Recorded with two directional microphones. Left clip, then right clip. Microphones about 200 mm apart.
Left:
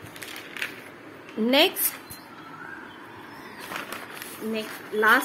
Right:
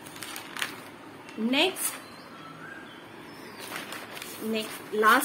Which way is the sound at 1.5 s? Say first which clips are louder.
Left 5 dB; 50° left (ahead or behind).